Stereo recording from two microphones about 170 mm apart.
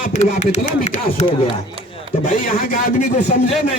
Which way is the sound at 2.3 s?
50° left (ahead or behind).